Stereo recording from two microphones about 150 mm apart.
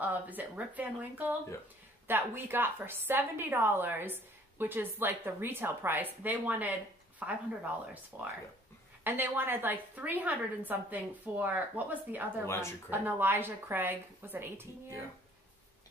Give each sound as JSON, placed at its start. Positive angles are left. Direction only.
{"t": 0.0, "sound": "a woman's voice", "side_deg": -10}
{"t": 12.4, "sound": "speech", "side_deg": 20}
{"t": 12.9, "sound": "a woman's voice", "side_deg": -15}